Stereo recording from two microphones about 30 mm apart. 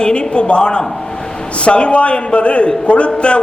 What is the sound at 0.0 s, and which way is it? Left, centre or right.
A man's voice, left.